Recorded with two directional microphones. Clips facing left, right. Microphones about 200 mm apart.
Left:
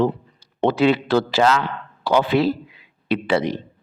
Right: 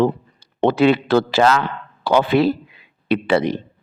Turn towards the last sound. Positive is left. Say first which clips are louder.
# right 3 dB
turn(degrees=-60)  # may be behind; listen again after turning